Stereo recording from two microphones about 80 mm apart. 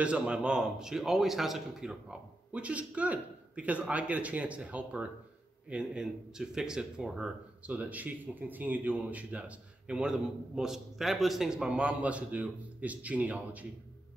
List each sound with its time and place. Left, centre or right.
0.0 s a man's voice: centre